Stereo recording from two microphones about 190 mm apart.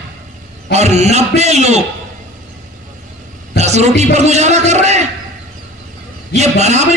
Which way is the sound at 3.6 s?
35° right (ahead or behind).